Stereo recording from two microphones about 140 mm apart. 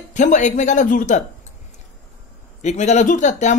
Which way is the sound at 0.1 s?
60° left (ahead or behind).